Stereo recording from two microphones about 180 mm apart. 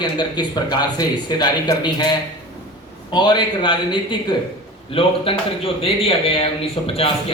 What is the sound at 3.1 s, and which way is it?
A man's voice, 25° left (ahead or behind).